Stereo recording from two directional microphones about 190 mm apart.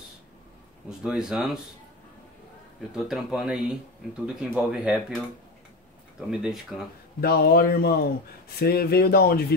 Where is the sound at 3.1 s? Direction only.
Centre (ahead or behind).